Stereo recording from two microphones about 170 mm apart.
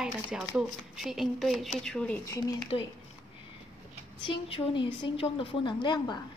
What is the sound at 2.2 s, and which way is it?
Speech, 20° left (ahead or behind).